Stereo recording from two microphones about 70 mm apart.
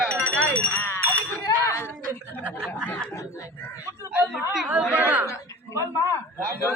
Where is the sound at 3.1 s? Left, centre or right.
Left.